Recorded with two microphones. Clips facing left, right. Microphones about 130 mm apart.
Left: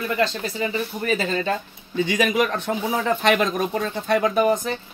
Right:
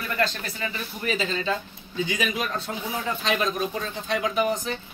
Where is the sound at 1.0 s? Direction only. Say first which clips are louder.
Left 2 dB; 50° left (ahead or behind).